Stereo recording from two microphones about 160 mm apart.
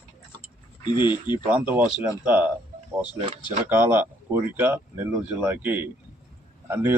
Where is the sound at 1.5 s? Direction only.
10° right (ahead or behind).